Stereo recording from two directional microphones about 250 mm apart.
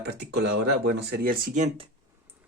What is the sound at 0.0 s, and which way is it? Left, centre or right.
Speech, right.